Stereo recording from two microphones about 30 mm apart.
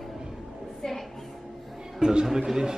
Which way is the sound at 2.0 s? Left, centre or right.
Right.